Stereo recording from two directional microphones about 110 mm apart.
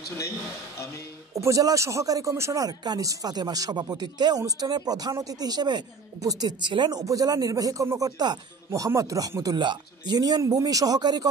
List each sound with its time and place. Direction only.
1.3 s speech: 30° right (ahead or behind)